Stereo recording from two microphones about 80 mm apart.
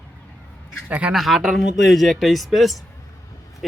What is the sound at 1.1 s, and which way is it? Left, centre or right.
Speech, centre.